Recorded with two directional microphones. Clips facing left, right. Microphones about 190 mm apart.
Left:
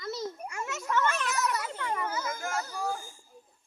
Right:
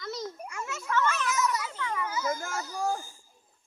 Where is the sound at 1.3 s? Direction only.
60° left (ahead or behind).